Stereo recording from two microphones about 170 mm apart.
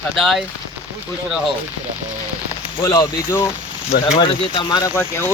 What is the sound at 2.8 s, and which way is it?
Speech, 20° left (ahead or behind).